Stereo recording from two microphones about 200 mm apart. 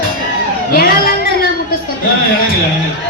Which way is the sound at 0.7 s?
50° left (ahead or behind).